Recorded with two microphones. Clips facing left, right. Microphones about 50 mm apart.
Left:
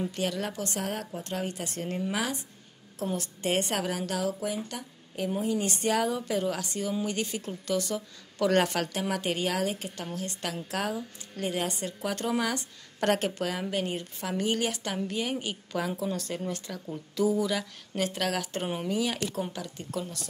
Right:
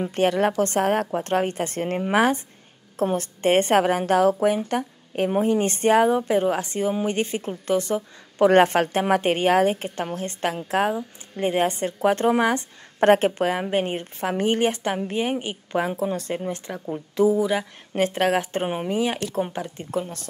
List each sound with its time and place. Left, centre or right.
0.0 s a woman's voice: right